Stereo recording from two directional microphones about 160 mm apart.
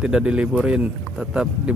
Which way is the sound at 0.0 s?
5° right (ahead or behind).